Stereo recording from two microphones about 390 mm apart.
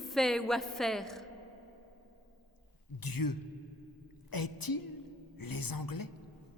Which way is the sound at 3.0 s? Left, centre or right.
Left.